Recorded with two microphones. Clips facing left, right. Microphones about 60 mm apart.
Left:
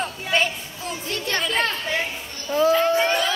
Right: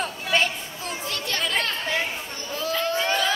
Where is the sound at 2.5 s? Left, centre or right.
Left.